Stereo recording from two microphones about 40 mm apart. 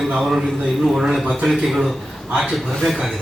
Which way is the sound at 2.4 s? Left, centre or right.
Centre.